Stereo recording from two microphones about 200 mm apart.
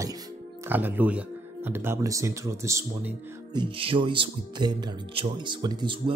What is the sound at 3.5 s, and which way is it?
Speech, 25° right (ahead or behind).